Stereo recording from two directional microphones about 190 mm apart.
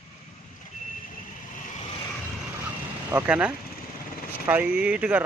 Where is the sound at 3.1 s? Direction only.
10° right (ahead or behind).